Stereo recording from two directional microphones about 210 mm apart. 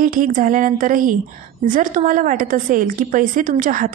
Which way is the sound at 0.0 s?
40° right (ahead or behind).